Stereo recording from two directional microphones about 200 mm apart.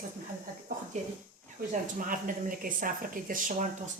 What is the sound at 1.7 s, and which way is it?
Speech, 40° right (ahead or behind).